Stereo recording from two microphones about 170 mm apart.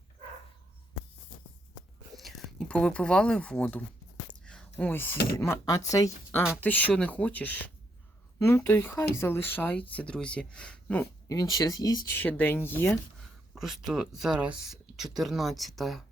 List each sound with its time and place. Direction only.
2.1 s speech: centre (ahead or behind)
4.4 s whispering: 5° left (ahead or behind)
5.4 s speech: 20° left (ahead or behind)
6.6 s speech: 10° left (ahead or behind)
11.0 s speech: 20° left (ahead or behind)
12.2 s speech: 10° left (ahead or behind)
13.5 s speech: centre (ahead or behind)